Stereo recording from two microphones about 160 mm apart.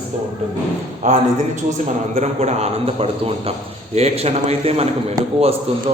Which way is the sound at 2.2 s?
45° right (ahead or behind).